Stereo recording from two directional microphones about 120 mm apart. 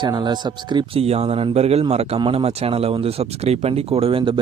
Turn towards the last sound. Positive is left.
turn(degrees=-45)  # may be behind; listen again after turning